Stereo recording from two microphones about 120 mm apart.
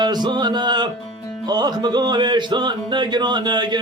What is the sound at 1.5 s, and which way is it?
Music, 35° right (ahead or behind).